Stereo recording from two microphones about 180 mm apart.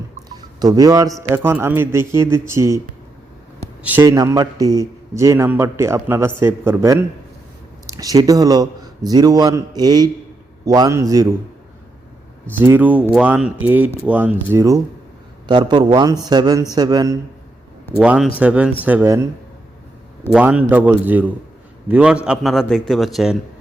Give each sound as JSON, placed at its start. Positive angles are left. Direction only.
{"t": 0.6, "sound": "a man's voice", "side_deg": -20}
{"t": 3.8, "sound": "a man's voice", "side_deg": -15}
{"t": 12.5, "sound": "a man's voice", "side_deg": -10}
{"t": 18.0, "sound": "a man's voice", "side_deg": -5}
{"t": 20.3, "sound": "a man's voice", "side_deg": -5}